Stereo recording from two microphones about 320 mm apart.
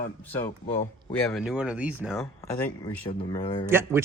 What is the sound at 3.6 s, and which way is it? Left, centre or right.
Speech, centre.